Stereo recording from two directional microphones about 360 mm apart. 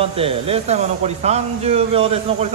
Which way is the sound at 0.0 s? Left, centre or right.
Centre.